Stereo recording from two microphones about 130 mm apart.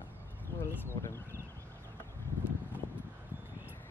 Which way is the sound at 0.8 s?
20° left (ahead or behind).